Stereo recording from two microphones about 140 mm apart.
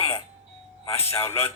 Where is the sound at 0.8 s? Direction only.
15° left (ahead or behind).